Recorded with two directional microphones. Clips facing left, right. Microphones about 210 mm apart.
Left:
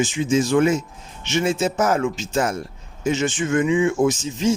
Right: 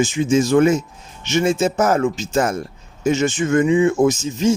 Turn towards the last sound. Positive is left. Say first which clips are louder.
# right 3 dB
turn(degrees=-45)  # may be behind; listen again after turning